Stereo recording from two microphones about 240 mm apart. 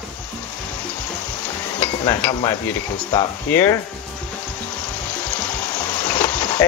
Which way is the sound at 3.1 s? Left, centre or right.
Centre.